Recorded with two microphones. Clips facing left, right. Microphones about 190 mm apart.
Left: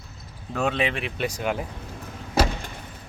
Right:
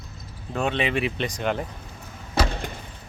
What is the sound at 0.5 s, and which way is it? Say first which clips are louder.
Speech: right 1 dB; centre (ahead or behind).